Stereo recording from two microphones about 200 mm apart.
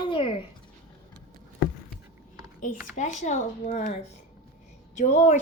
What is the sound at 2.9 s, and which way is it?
Speech, 35° left (ahead or behind).